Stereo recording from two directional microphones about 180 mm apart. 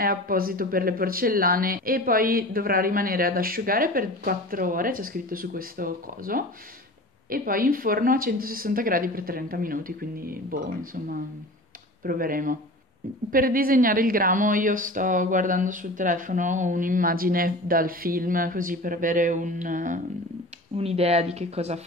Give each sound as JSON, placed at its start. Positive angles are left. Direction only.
{"t": 0.0, "sound": "speech", "side_deg": -55}
{"t": 20.7, "sound": "speech", "side_deg": -35}